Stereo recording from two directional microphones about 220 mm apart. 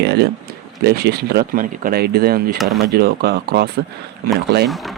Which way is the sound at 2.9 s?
45° right (ahead or behind).